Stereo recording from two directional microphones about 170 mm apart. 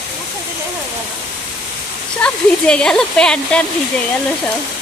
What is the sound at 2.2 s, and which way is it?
Speech, 5° left (ahead or behind).